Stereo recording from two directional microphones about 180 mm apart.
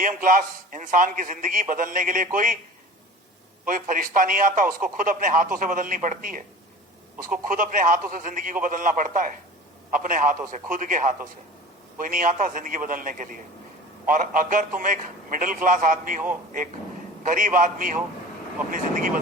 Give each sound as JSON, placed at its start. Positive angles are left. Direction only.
{"t": 0.0, "sound": "a man's voice", "side_deg": -50}
{"t": 3.7, "sound": "a man's voice", "side_deg": -50}
{"t": 17.2, "sound": "a man's voice", "side_deg": -45}